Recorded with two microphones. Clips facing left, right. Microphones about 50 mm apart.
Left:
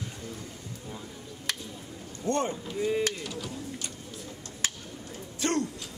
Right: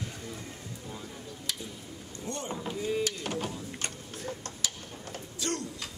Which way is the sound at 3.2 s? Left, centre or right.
Right.